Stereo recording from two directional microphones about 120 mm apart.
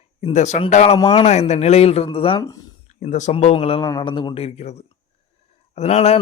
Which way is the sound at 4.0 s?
45° left (ahead or behind).